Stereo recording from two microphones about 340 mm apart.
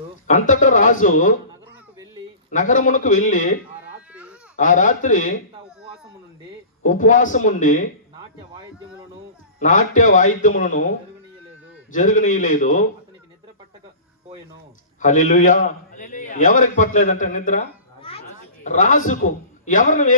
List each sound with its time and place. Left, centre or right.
0.3 s a man's voice: left
2.5 s a man's voice: left
4.1 s baby cry: centre
4.6 s a man's voice: left
6.8 s a man's voice: left
9.6 s a man's voice: left
15.0 s a man's voice: left